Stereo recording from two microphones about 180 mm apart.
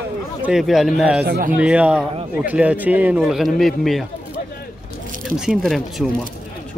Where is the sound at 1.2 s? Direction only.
60° right (ahead or behind).